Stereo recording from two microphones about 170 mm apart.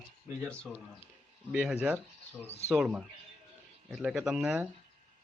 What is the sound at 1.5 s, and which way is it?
Speech, 5° right (ahead or behind).